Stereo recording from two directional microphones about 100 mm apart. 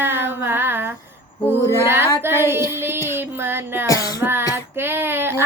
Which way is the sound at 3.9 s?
35° left (ahead or behind).